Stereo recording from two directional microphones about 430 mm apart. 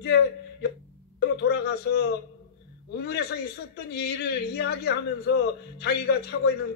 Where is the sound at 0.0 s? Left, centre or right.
Left.